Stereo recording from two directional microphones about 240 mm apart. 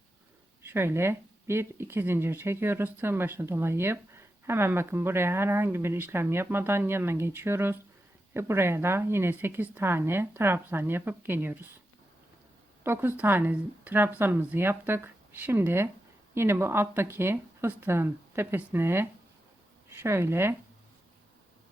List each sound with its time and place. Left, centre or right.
0.6 s speech: centre
12.8 s speech: centre